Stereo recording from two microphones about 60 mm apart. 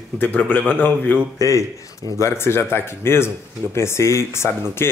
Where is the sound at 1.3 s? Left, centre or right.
Left.